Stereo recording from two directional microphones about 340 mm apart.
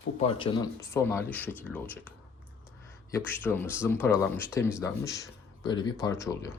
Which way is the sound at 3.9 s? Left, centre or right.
Centre.